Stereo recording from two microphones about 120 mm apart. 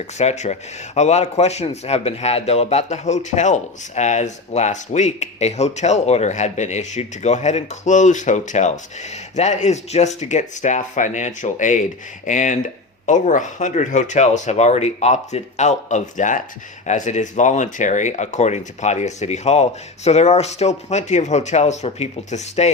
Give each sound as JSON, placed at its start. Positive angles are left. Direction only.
{"t": 0.2, "sound": "a man's voice", "side_deg": 70}